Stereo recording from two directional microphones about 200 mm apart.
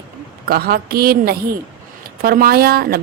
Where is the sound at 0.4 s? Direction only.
50° right (ahead or behind).